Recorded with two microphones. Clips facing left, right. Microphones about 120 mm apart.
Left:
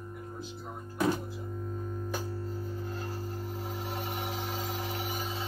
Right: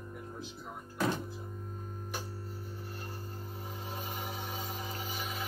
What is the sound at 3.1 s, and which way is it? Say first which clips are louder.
Music: left 6 dB; 90° left.